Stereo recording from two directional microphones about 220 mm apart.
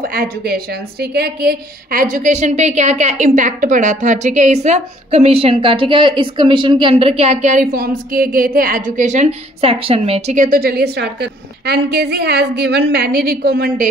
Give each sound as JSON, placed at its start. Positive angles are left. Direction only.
{"t": 0.1, "sound": "a woman's voice", "side_deg": -45}